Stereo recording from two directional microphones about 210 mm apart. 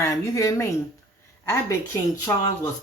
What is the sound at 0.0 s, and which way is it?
Speech, 15° left (ahead or behind).